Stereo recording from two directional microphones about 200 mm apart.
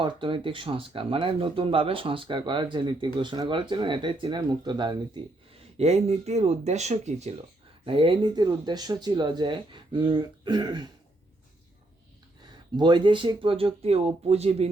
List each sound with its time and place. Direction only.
0.0 s speech: 25° right (ahead or behind)
5.7 s speech: 30° right (ahead or behind)
12.7 s speech: 20° right (ahead or behind)